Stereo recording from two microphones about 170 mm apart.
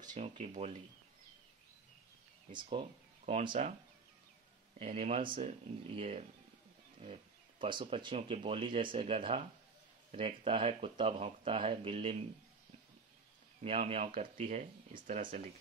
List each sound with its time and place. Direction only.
0.1 s speech: 45° right (ahead or behind)
2.8 s speech: 40° right (ahead or behind)
4.7 s speech: 40° right (ahead or behind)
13.6 s speech: 35° right (ahead or behind)